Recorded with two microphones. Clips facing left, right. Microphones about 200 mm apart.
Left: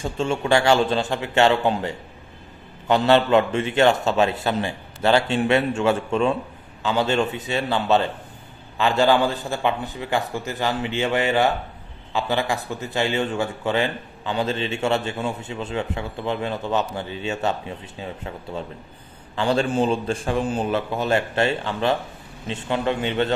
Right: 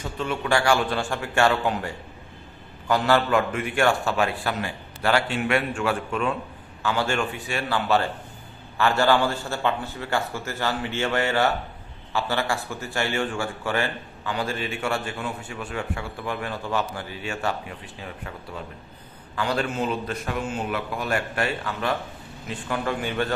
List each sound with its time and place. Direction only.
0.0 s a man's voice: 25° left (ahead or behind)